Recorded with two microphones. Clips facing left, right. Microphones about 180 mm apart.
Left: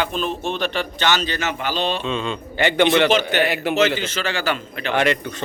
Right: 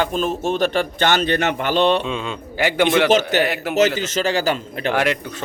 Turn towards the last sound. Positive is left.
turn(degrees=-5)  # may be behind; listen again after turning